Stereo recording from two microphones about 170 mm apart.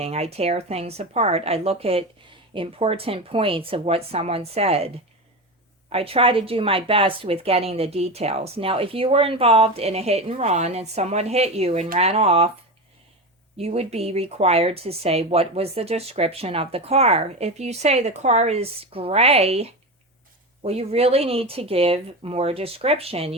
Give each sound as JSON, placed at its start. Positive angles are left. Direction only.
{"t": 0.0, "sound": "speech", "side_deg": -35}
{"t": 5.9, "sound": "speech", "side_deg": -35}
{"t": 13.6, "sound": "speech", "side_deg": -35}